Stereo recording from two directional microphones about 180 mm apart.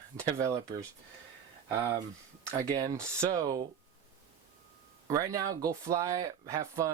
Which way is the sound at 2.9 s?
15° right (ahead or behind).